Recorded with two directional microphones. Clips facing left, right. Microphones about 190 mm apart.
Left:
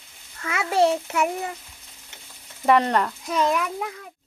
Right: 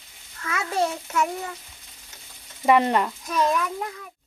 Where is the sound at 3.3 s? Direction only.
15° left (ahead or behind).